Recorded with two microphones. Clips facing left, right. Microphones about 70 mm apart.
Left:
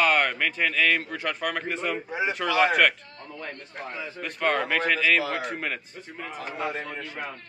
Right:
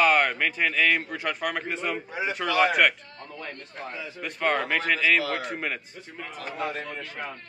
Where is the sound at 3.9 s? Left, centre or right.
Left.